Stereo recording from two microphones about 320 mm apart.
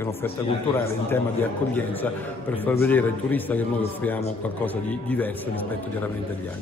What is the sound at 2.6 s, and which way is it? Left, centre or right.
A man's voice, centre.